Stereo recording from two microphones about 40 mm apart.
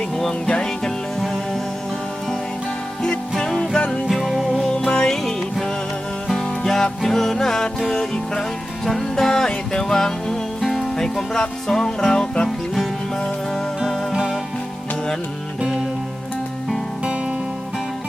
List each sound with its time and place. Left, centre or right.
0.2 s music: centre
3.3 s music: centre
4.1 s music: centre
4.8 s music: centre
10.9 s music: centre
14.1 s music: centre